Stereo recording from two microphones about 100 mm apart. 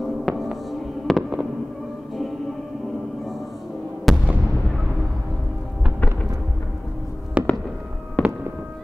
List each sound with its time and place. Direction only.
0.2 s fireworks: centre (ahead or behind)
4.1 s fireworks: centre (ahead or behind)
7.4 s fireworks: 10° right (ahead or behind)
8.2 s fireworks: 15° left (ahead or behind)